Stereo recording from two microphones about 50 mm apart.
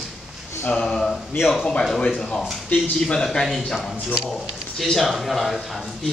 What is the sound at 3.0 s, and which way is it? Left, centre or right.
Speech, centre.